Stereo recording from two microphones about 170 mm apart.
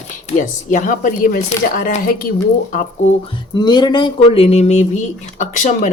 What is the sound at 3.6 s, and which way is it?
Speech, 25° left (ahead or behind).